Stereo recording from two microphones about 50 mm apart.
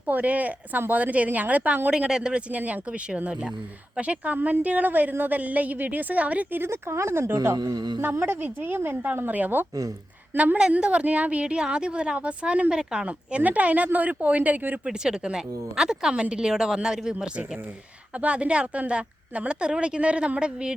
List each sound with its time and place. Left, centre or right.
0.1 s a woman's voice: right
1.9 s speech: centre
2.5 s a woman's voice: right
3.9 s a woman's voice: right
4.4 s a woman's voice: right
6.6 s a woman's voice: right
10.3 s a woman's voice: right
13.1 s a woman's voice: right
14.8 s speech: centre
18.2 s a woman's voice: right